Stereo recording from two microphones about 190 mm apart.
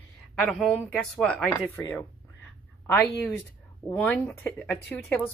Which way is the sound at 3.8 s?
10° left (ahead or behind).